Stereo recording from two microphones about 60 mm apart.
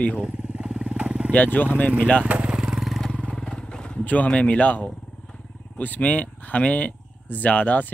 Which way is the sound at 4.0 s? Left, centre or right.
Left.